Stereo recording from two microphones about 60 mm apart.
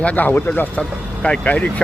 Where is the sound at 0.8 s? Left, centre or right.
Centre.